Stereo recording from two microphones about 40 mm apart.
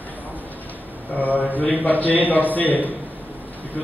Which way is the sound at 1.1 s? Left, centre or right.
Left.